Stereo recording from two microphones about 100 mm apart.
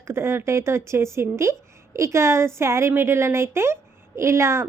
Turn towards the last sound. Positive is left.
turn(degrees=-25)  # may be behind; listen again after turning